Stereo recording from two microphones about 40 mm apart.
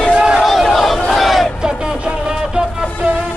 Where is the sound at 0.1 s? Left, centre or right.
Right.